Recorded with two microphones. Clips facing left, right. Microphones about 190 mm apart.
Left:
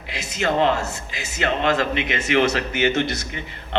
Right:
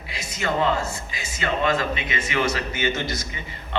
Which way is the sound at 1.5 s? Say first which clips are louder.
Left 2 dB; 70° left (ahead or behind).